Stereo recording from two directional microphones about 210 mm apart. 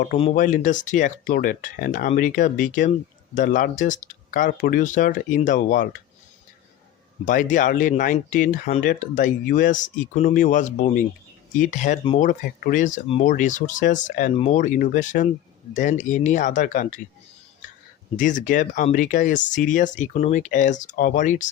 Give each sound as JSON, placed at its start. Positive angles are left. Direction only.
{"t": 0.2, "sound": "speech", "side_deg": 35}
{"t": 7.3, "sound": "speech", "side_deg": 40}
{"t": 18.2, "sound": "speech", "side_deg": 35}